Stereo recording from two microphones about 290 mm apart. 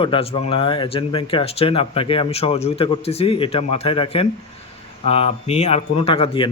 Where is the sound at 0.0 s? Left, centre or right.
Centre.